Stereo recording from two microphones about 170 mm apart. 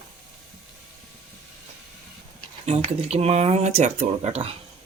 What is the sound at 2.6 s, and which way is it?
Speech, 40° right (ahead or behind).